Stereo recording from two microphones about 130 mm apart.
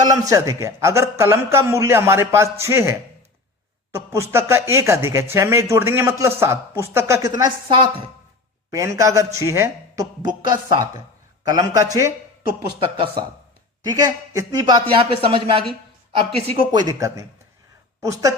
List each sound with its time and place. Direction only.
0.1 s speech: 25° right (ahead or behind)
8.7 s speech: 25° right (ahead or behind)
10.2 s a man's voice: 35° right (ahead or behind)
12.8 s a man's voice: 40° right (ahead or behind)
13.8 s a man's voice: 30° right (ahead or behind)
16.6 s a man's voice: 30° right (ahead or behind)